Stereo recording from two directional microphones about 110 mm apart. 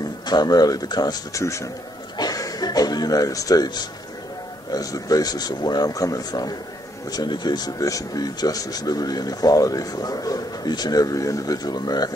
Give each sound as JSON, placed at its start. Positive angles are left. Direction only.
{"t": 0.3, "sound": "speech", "side_deg": 40}
{"t": 1.4, "sound": "speech", "side_deg": 25}
{"t": 2.1, "sound": "a sound", "side_deg": 35}
{"t": 4.7, "sound": "speech", "side_deg": 35}